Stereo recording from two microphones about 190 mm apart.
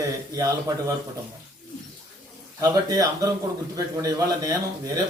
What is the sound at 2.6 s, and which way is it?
A man's voice, 20° right (ahead or behind).